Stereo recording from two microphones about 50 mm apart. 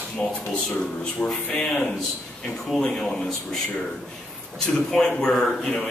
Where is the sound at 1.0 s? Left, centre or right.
Centre.